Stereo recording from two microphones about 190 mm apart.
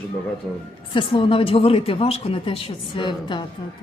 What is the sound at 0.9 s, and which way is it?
Speech, 25° left (ahead or behind).